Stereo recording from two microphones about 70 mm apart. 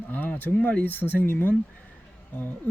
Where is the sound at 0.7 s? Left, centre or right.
Left.